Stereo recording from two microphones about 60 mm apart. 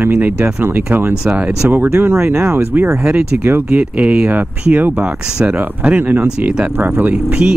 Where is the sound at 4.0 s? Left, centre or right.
Right.